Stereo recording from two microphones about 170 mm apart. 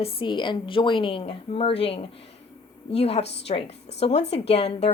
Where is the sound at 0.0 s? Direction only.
30° left (ahead or behind).